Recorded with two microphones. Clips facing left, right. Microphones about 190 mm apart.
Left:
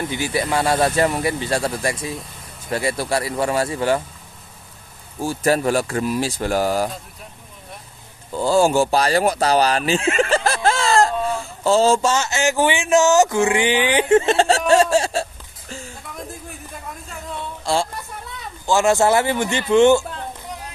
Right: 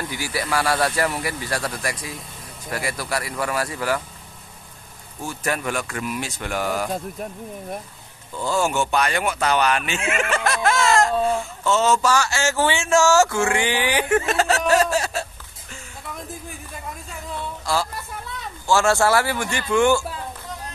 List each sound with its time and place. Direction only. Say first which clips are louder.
0.0 s speech: left 5 dB; 20° left (ahead or behind)
5.2 s speech: left 7 dB; 35° left (ahead or behind)
8.4 s speech: left 6 dB; 35° left (ahead or behind)
16.2 s a sound: left 4 dB; centre (ahead or behind)
17.7 s speech: left 3 dB; 25° left (ahead or behind)